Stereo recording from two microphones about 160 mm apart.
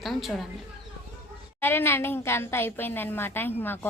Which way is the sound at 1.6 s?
15° left (ahead or behind).